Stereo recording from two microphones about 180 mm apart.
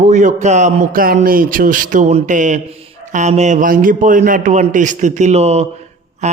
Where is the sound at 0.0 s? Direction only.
40° right (ahead or behind).